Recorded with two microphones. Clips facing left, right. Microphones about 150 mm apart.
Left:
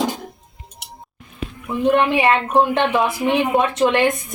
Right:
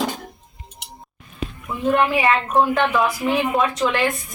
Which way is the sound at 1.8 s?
25° left (ahead or behind).